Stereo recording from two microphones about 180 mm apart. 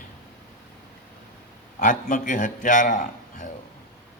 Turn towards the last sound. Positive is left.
turn(degrees=45)  # may be behind; listen again after turning